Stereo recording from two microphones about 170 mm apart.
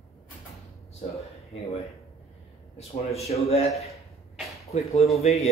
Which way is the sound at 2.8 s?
40° left (ahead or behind).